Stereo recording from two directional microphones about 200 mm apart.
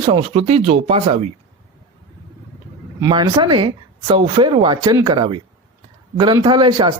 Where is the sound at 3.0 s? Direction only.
20° right (ahead or behind).